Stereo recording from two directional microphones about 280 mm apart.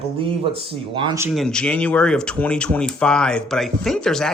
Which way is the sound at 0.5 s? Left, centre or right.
Centre.